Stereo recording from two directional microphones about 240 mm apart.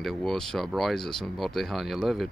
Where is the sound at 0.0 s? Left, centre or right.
Centre.